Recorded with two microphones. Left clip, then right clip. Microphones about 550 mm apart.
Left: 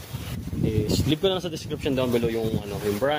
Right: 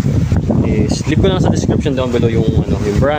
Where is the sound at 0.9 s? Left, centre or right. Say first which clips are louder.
Right 6 dB; left.